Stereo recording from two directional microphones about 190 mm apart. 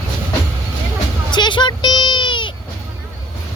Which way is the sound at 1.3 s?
25° left (ahead or behind).